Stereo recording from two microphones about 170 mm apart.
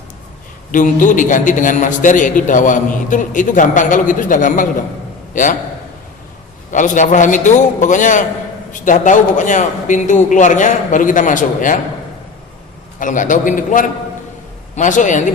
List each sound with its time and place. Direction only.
0.7 s a man's voice: 50° left (ahead or behind)
6.7 s a man's voice: 50° left (ahead or behind)
13.0 s a man's voice: 50° left (ahead or behind)